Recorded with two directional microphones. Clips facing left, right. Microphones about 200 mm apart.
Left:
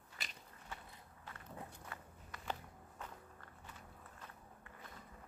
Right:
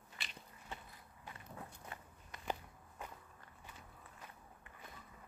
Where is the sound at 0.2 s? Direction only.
40° left (ahead or behind).